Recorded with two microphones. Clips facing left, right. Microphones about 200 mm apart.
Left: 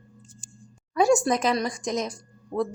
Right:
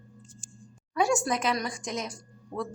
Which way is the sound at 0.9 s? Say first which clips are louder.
Left 6 dB; 40° left (ahead or behind).